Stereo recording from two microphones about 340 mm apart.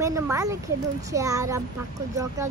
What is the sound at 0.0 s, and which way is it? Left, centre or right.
Speech, centre.